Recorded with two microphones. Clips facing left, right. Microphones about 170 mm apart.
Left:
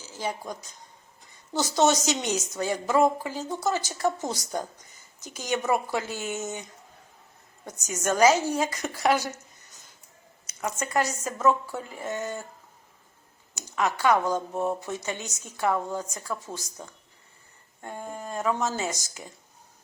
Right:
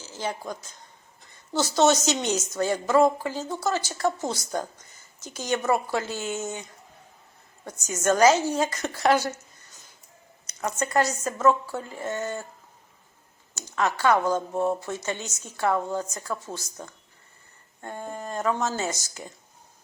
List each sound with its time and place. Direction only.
0.2 s speech: 10° left (ahead or behind)
1.9 s speech: 15° left (ahead or behind)
10.4 s speech: 10° left (ahead or behind)
13.6 s speech: 15° left (ahead or behind)
14.5 s speech: centre (ahead or behind)
14.8 s speech: 15° left (ahead or behind)
17.8 s speech: 10° left (ahead or behind)